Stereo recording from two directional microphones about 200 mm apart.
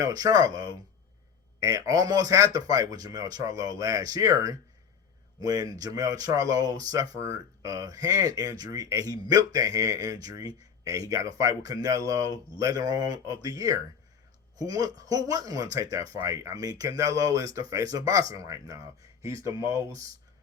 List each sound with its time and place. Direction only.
0.0 s speech: 20° right (ahead or behind)